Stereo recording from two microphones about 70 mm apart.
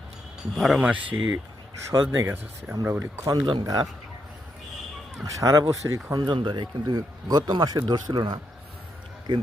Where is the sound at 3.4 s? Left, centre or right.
Right.